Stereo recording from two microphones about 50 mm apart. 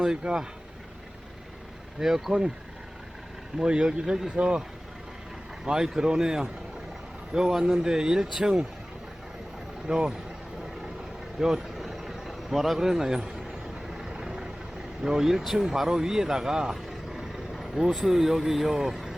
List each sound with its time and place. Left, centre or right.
0.0 s speech: centre
2.0 s speech: centre
3.6 s speech: centre
5.6 s speech: centre
9.8 s speech: centre
11.3 s vehicle: centre
15.0 s speech: centre
16.7 s vehicle: centre